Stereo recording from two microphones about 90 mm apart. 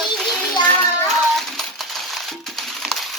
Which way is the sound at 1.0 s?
5° left (ahead or behind).